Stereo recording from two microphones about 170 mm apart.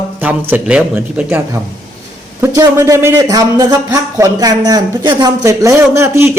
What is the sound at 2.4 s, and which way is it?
A man's voice, 15° right (ahead or behind).